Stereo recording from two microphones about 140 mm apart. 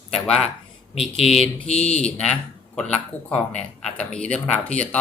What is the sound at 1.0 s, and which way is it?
Speech, 45° left (ahead or behind).